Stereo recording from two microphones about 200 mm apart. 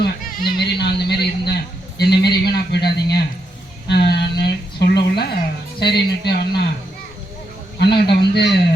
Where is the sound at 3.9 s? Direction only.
55° left (ahead or behind).